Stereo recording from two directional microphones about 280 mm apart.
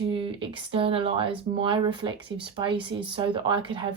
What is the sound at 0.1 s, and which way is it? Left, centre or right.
A woman's voice, centre.